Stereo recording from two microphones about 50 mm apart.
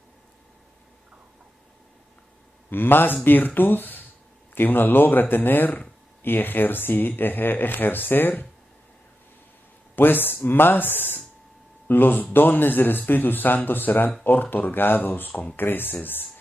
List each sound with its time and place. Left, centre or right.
2.7 s speech: left
9.9 s speech: left